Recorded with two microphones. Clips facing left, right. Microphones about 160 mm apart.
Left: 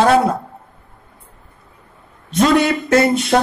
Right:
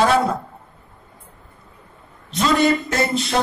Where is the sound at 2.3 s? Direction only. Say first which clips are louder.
Left 3 dB; 65° left (ahead or behind).